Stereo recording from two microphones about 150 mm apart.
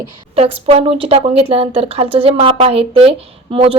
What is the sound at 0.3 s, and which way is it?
A woman's voice, 40° right (ahead or behind).